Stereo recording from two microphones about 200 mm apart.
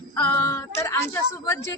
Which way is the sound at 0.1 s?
10° left (ahead or behind).